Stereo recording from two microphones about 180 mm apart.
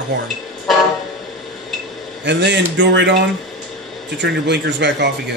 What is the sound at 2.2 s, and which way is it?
Speech, 75° right (ahead or behind).